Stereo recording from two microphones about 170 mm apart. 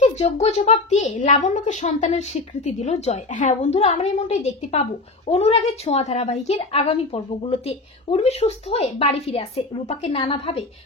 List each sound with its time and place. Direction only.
0.0 s a woman's voice: 40° left (ahead or behind)